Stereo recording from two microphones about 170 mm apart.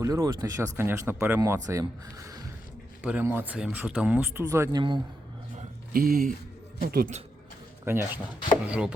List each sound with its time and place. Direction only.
0.0 s speech: 20° right (ahead or behind)
3.0 s speech: 10° right (ahead or behind)
4.8 s speech: 25° right (ahead or behind)
5.9 s speech: 55° right (ahead or behind)
7.9 s speech: 15° right (ahead or behind)